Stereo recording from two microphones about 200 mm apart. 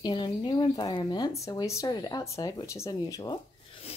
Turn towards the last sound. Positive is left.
turn(degrees=25)  # may be behind; listen again after turning